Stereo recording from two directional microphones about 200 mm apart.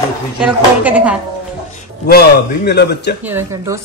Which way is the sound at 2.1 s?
55° left (ahead or behind).